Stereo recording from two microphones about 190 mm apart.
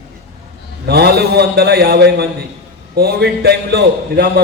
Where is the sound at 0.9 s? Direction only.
55° right (ahead or behind).